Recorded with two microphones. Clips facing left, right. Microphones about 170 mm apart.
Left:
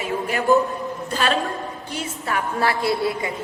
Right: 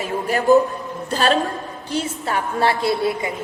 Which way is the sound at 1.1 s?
35° right (ahead or behind).